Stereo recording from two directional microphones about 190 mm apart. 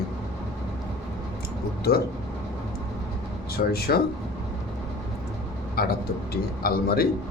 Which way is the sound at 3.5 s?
55° left (ahead or behind).